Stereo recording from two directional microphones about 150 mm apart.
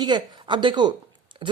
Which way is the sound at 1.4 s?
35° right (ahead or behind).